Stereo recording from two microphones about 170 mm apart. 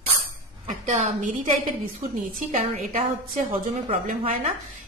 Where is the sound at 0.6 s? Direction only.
45° right (ahead or behind).